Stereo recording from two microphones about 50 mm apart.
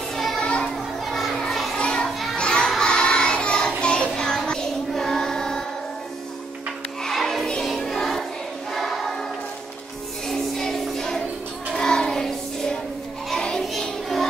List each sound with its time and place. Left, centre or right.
0.1 s children playing: centre
0.4 s children playing: centre
1.0 s children playing: centre
1.8 s children playing: centre
2.0 s children playing: centre
2.3 s children playing: centre
2.8 s child singing: centre
7.0 s music: centre
8.7 s choir: centre
10.2 s music: centre
13.3 s child singing: centre